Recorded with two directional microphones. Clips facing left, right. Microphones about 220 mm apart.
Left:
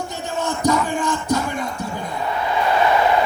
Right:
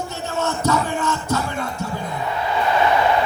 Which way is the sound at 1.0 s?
15° left (ahead or behind).